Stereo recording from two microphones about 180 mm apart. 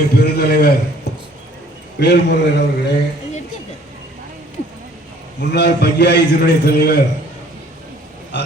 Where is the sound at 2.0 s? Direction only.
70° left (ahead or behind).